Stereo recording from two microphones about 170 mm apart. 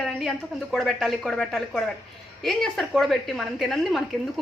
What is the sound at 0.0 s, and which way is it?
A woman's voice, centre (ahead or behind).